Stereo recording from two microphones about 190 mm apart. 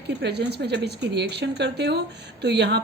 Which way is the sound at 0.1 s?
60° right (ahead or behind).